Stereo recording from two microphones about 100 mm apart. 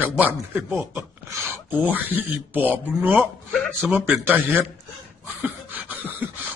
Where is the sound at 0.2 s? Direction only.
20° right (ahead or behind).